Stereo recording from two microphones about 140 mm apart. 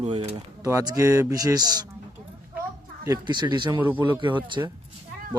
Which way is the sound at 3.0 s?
30° right (ahead or behind).